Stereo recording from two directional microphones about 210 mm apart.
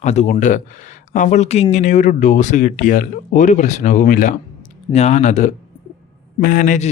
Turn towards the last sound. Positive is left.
turn(degrees=40)  # may be behind; listen again after turning